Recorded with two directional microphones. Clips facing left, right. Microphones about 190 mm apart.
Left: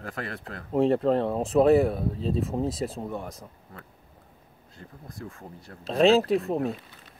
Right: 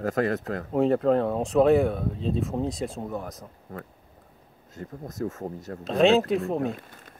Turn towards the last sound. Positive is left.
turn(degrees=-50)  # may be behind; listen again after turning